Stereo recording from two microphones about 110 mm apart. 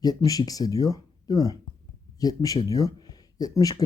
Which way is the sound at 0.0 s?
35° left (ahead or behind).